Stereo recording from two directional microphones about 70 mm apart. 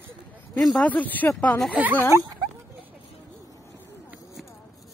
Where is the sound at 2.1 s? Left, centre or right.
Right.